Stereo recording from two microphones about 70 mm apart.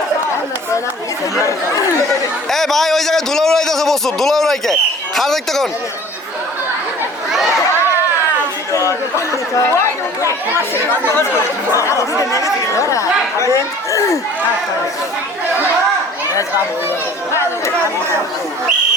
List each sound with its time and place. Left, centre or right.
1.4 s speech: left
2.0 s a man's voice: centre
8.7 s speech: left
11.7 s speech: left